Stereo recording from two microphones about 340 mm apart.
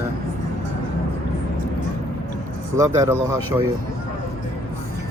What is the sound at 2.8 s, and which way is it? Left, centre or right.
Speech, centre.